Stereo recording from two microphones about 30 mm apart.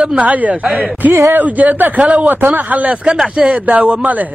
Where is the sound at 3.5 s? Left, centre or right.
Right.